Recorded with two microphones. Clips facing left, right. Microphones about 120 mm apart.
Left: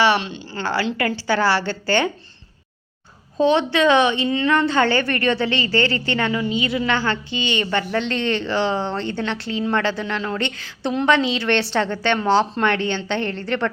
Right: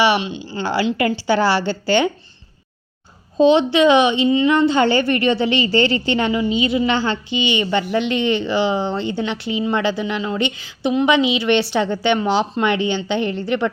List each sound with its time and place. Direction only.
0.0 s a woman's voice: 10° right (ahead or behind)
3.3 s a woman's voice: 20° right (ahead or behind)